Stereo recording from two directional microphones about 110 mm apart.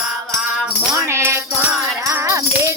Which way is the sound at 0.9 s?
25° right (ahead or behind).